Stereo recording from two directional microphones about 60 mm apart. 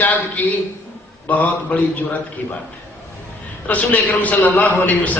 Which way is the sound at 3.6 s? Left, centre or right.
Left.